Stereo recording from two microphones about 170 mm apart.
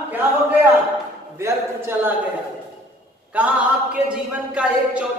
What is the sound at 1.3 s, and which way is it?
Speech, 15° right (ahead or behind).